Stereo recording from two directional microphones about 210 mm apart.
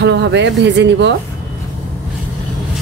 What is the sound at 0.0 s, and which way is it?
Speech, 55° right (ahead or behind).